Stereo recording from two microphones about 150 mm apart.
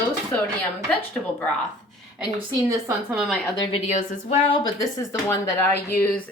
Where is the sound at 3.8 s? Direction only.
50° left (ahead or behind).